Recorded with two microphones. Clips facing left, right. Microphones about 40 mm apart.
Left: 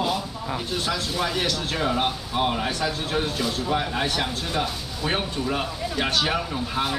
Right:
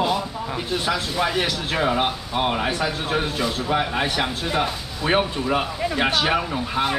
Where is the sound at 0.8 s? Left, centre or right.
Centre.